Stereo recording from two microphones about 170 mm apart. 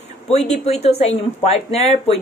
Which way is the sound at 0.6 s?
40° left (ahead or behind).